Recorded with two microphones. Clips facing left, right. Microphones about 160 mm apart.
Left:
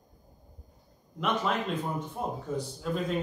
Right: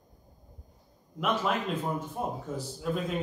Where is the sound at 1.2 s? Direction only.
5° right (ahead or behind).